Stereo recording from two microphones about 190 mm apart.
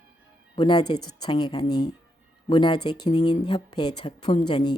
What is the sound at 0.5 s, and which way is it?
A woman's voice, 25° left (ahead or behind).